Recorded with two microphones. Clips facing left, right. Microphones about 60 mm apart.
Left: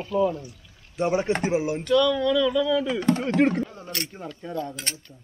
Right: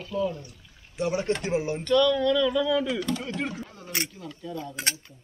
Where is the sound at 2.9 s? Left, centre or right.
Left.